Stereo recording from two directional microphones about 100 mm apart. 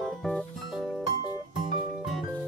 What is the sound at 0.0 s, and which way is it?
Music, 5° left (ahead or behind).